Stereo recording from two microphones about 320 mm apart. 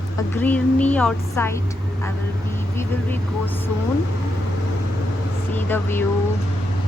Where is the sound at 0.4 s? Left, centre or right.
Centre.